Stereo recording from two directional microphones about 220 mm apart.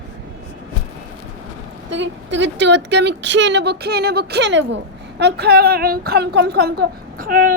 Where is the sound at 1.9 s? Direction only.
55° right (ahead or behind).